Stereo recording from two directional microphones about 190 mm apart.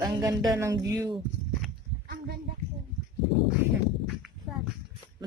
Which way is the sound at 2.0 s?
55° right (ahead or behind).